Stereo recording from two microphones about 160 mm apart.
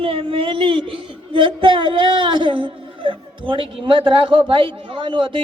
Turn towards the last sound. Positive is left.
turn(degrees=-30)  # may be behind; listen again after turning